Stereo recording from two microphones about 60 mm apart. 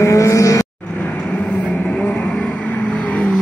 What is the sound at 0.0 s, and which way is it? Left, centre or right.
Vehicle, left.